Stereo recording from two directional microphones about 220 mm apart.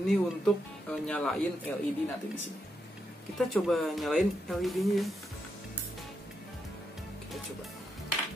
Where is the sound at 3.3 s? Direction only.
Centre (ahead or behind).